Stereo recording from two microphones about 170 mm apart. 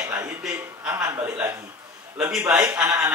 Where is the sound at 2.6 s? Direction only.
15° right (ahead or behind).